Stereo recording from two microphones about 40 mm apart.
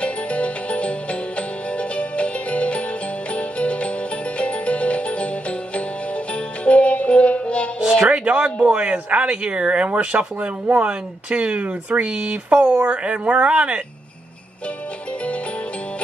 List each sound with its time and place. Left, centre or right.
0.0 s music: left
6.6 s music: left
7.8 s music: right
8.6 s speech: right
12.1 s speech: right